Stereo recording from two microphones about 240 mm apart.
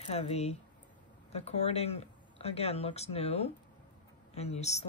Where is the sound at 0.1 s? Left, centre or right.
Left.